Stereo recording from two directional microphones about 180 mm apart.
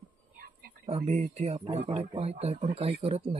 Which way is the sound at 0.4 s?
55° right (ahead or behind).